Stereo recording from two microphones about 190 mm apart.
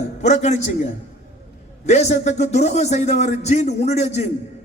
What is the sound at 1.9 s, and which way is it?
A man's voice, 35° left (ahead or behind).